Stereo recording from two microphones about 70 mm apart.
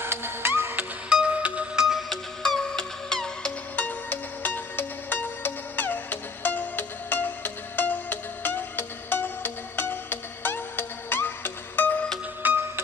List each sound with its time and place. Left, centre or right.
0.0 s music: right
1.0 s music: centre
1.9 s music: centre
3.7 s music: left
12.4 s music: right